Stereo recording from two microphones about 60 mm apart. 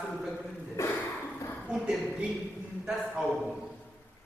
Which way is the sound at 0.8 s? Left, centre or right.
Left.